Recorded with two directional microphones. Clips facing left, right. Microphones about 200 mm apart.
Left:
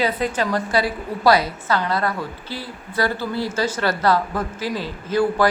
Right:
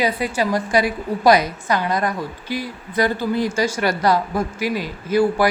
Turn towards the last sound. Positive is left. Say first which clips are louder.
# right 2 dB
turn(degrees=-10)  # may be behind; listen again after turning